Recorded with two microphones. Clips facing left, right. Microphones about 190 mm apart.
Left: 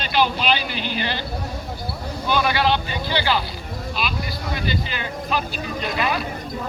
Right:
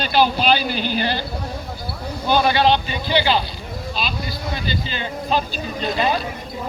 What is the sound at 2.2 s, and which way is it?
Speech, 30° right (ahead or behind).